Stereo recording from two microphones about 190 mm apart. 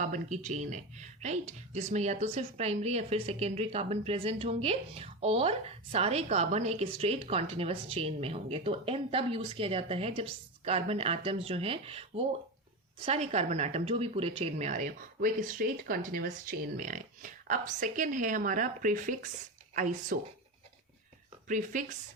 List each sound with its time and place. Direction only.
0.0 s speech: 40° right (ahead or behind)
21.4 s speech: 45° right (ahead or behind)